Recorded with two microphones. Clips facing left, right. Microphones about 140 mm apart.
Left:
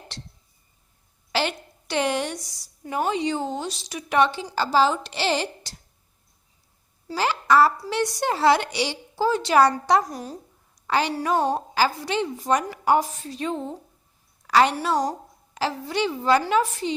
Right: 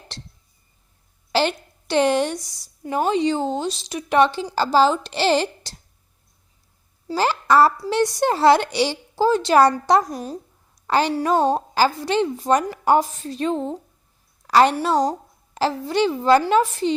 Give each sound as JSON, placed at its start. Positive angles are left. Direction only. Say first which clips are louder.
{"t": 1.3, "sound": "a woman's voice", "louder": "right 5 dB", "side_deg": -30}
{"t": 7.1, "sound": "a woman's voice", "louder": "right 2 dB", "side_deg": -35}
{"t": 10.8, "sound": "a woman's voice", "louder": "right 4 dB", "side_deg": -35}
{"t": 14.4, "sound": "a sound", "louder": "right 3 dB", "side_deg": -35}
{"t": 14.8, "sound": "a woman's voice", "louder": "right 4 dB", "side_deg": -25}